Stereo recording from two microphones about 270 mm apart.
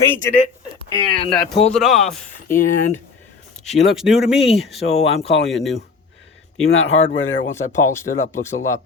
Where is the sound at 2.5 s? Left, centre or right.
Left.